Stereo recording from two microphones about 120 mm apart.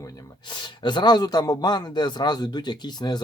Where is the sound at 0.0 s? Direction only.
40° left (ahead or behind).